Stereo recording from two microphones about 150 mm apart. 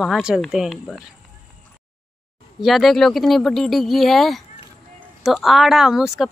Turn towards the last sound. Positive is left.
turn(degrees=-5)  # may be behind; listen again after turning